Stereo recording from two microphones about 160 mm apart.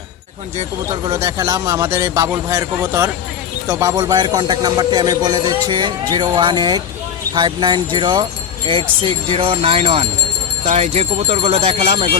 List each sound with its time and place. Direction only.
1.0 s a man's voice: 25° right (ahead or behind)